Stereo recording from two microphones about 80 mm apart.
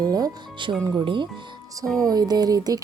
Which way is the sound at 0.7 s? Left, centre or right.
Right.